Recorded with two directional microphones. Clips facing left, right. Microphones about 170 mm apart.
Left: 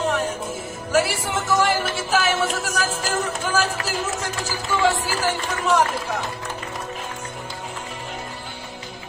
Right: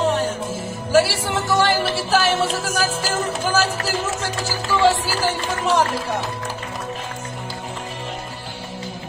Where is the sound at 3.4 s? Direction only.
Centre (ahead or behind).